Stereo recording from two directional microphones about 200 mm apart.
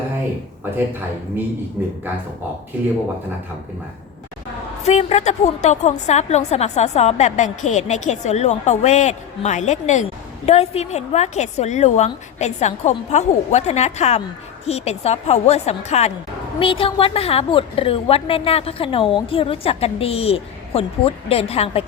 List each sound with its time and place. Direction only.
1.8 s a man's voice: 10° right (ahead or behind)
4.9 s a woman's voice: 35° left (ahead or behind)